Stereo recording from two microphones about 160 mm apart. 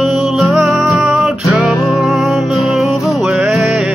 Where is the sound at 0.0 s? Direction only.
Centre (ahead or behind).